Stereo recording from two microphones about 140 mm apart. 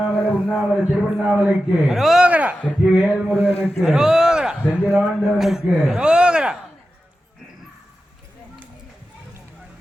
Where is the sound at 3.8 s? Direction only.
5° right (ahead or behind).